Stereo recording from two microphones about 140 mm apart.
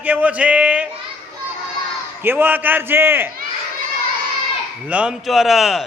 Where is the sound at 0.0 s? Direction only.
10° right (ahead or behind).